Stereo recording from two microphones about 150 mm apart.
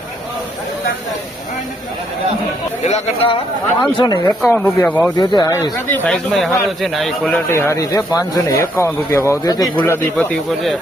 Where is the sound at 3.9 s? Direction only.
30° left (ahead or behind).